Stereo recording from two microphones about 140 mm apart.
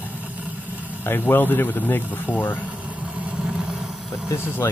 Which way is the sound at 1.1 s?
15° left (ahead or behind).